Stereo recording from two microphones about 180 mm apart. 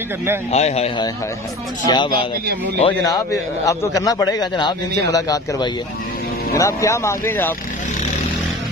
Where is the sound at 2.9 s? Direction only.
15° left (ahead or behind).